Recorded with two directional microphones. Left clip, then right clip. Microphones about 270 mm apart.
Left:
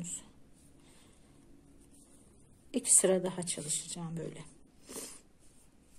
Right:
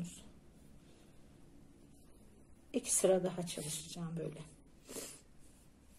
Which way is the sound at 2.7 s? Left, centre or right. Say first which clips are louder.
Left 2 dB; centre.